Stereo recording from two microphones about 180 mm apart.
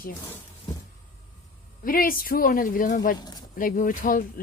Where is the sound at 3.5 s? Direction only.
50° left (ahead or behind).